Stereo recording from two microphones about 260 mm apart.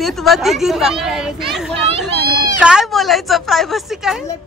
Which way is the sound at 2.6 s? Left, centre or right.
Centre.